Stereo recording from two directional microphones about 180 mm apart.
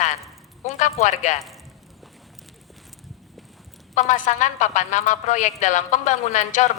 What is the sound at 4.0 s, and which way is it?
A woman's voice, 45° left (ahead or behind).